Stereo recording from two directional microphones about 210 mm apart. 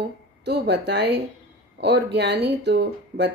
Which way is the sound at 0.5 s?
55° right (ahead or behind).